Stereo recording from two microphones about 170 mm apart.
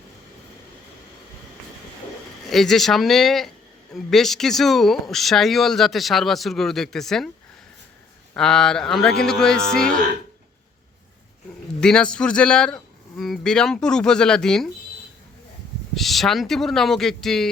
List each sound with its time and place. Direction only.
2.5 s speech: centre (ahead or behind)
8.3 s speech: 5° left (ahead or behind)
11.8 s speech: 5° left (ahead or behind)
16.0 s speech: centre (ahead or behind)